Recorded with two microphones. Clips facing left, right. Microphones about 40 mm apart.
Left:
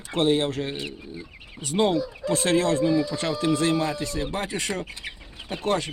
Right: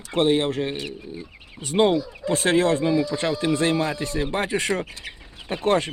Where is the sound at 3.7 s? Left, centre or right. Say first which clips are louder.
Right 1 dB; centre.